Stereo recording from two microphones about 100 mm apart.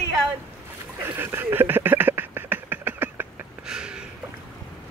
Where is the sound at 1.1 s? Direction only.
20° right (ahead or behind).